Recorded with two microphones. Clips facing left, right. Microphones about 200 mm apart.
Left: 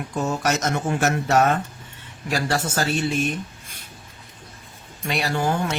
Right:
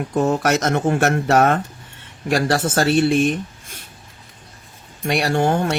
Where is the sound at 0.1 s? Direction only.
55° right (ahead or behind).